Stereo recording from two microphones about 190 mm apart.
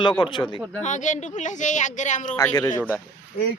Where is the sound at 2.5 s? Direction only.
20° left (ahead or behind).